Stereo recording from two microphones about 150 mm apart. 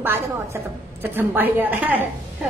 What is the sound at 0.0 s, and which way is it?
A woman's voice, 15° right (ahead or behind).